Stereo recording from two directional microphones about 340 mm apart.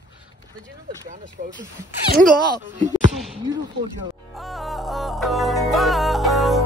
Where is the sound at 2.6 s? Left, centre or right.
Right.